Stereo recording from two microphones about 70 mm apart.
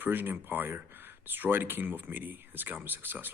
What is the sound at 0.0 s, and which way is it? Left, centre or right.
Speech, right.